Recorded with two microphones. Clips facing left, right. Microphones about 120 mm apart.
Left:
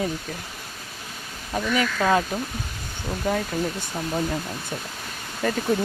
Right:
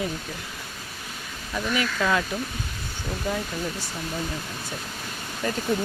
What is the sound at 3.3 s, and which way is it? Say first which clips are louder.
Speech: left 4 dB; 50° left (ahead or behind).